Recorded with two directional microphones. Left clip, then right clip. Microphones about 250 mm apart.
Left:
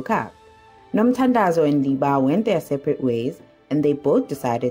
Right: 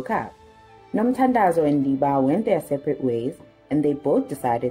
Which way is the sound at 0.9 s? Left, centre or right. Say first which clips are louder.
Left 1 dB; left.